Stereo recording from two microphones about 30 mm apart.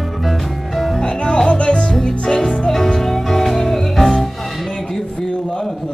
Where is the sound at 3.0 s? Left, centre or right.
Centre.